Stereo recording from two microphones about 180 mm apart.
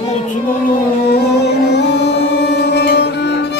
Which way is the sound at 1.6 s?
70° left (ahead or behind).